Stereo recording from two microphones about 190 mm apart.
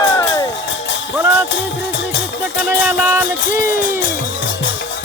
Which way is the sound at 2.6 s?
10° right (ahead or behind).